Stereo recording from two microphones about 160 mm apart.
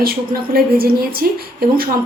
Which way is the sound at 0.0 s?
70° right (ahead or behind).